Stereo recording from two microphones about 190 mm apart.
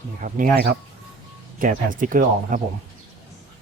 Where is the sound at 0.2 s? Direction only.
45° right (ahead or behind).